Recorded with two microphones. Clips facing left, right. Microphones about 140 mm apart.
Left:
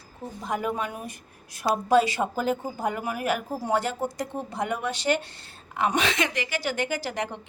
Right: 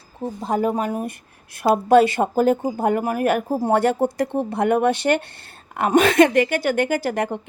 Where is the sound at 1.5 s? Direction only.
60° right (ahead or behind).